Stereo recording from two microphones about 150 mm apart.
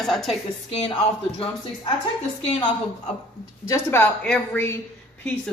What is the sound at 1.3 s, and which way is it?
Speech, 40° left (ahead or behind).